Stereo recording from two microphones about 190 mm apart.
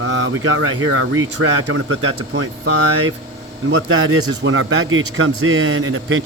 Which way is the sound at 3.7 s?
85° right.